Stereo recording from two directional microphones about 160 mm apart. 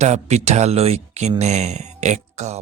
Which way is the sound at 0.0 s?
45° right (ahead or behind).